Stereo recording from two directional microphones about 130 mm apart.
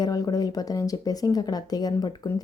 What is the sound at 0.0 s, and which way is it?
A woman's voice, 30° left (ahead or behind).